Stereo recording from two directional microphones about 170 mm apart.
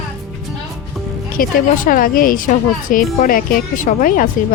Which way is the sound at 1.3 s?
55° left (ahead or behind).